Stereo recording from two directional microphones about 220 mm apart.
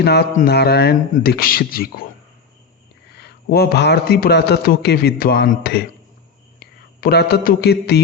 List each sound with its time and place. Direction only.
0.0 s a man's voice: 45° left (ahead or behind)
3.2 s a man's voice: 45° left (ahead or behind)